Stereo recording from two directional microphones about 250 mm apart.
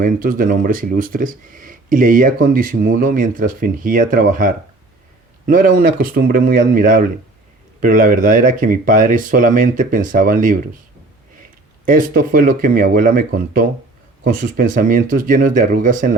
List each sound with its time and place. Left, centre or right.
0.0 s speech: right
11.9 s speech: right